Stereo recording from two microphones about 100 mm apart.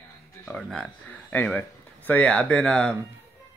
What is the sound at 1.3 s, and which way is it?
A man's voice, 15° left (ahead or behind).